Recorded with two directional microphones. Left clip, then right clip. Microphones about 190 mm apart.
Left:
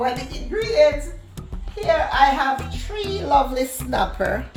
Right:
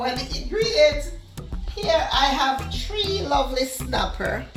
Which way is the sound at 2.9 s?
40° left (ahead or behind).